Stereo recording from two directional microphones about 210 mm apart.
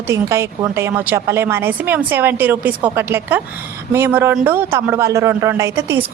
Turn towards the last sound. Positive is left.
turn(degrees=-15)  # may be behind; listen again after turning